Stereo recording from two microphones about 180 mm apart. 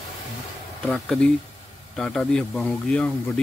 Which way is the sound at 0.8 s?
5° left (ahead or behind).